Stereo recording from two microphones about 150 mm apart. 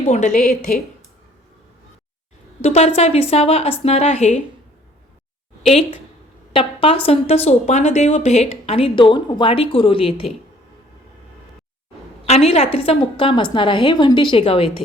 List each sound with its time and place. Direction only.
0.1 s a woman's voice: 50° left (ahead or behind)
2.6 s a woman's voice: 45° left (ahead or behind)
6.5 s a woman's voice: 40° left (ahead or behind)
12.2 s a woman's voice: 45° left (ahead or behind)